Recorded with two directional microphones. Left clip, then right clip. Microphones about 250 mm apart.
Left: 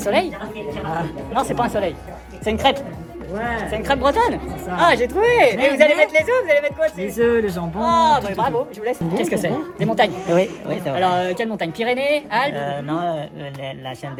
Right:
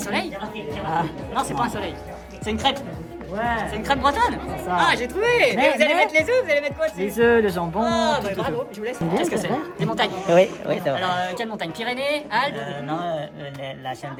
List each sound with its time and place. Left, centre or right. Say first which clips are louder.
0.0 s a woman's voice: left 7 dB; centre
7.0 s speech: right 3 dB; right
7.8 s speech: left 7 dB; centre
9.0 s speech: right 1 dB; centre